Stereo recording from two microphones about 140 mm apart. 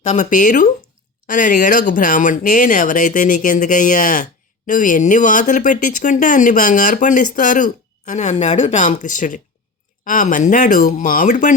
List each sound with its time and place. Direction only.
0.1 s speech: 65° left (ahead or behind)